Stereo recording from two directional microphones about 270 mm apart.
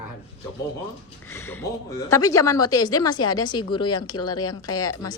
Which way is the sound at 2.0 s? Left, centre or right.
Centre.